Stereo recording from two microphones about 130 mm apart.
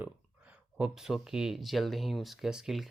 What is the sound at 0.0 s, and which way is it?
Speech, 10° right (ahead or behind).